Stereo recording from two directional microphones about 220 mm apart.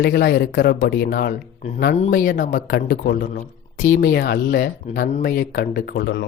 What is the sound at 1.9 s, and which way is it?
A man's voice, 35° left (ahead or behind).